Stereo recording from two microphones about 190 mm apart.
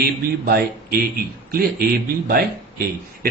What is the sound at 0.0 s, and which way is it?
A man's voice, 55° right (ahead or behind).